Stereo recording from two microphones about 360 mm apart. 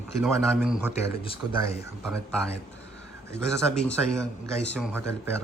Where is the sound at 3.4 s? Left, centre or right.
Centre.